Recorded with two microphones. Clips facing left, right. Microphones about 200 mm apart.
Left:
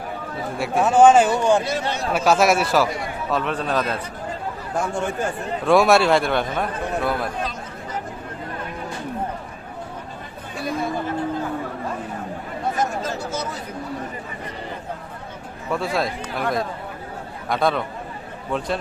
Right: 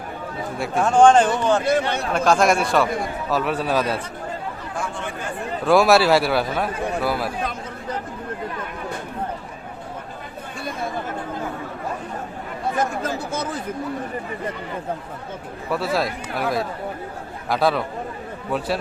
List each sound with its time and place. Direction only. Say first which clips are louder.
0.6 s speech: left 1 dB; centre (ahead or behind)
1.6 s speech: right 4 dB; 55° right (ahead or behind)
2.1 s a man's voice: even; 5° left (ahead or behind)
4.7 s speech: left 7 dB; 45° left (ahead or behind)
5.6 s speech: even; centre (ahead or behind)
13.0 s speech: right 1 dB; 55° right (ahead or behind)
15.7 s speech: right 1 dB; centre (ahead or behind)